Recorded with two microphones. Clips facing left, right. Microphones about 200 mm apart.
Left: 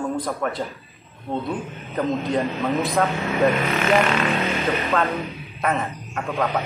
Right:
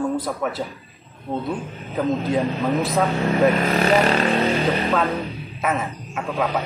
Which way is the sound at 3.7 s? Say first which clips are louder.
Right 2 dB; 35° right (ahead or behind).